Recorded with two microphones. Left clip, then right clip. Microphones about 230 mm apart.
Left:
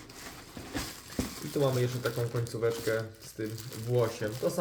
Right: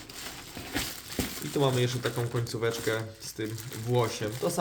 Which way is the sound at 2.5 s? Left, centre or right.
Right.